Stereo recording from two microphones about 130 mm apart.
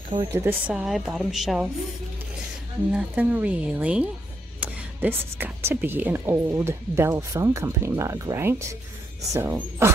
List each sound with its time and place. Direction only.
0.3 s speech: 20° right (ahead or behind)
0.7 s a woman's voice: 5° right (ahead or behind)
2.9 s speech: 10° right (ahead or behind)